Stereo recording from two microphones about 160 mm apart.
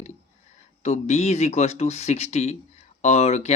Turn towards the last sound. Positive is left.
turn(degrees=45)  # may be behind; listen again after turning